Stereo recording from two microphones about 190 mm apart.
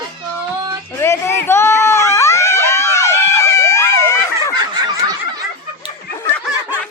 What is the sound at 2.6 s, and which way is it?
Screaming, 15° left (ahead or behind).